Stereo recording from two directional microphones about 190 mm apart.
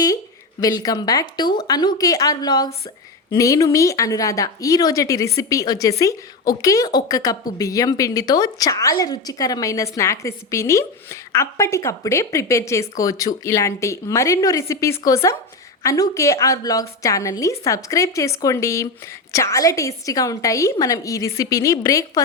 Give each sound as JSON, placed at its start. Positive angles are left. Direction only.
{"t": 0.6, "sound": "a woman's voice", "side_deg": 20}